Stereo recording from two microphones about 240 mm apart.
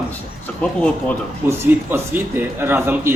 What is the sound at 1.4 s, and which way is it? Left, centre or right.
Speech, centre.